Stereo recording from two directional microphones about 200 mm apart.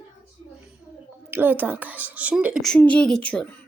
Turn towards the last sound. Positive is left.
turn(degrees=5)  # may be behind; listen again after turning